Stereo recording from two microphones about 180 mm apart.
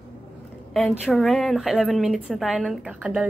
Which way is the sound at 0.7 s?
5° right (ahead or behind).